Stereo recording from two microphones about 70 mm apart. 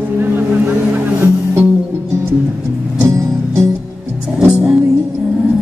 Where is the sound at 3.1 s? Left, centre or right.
Right.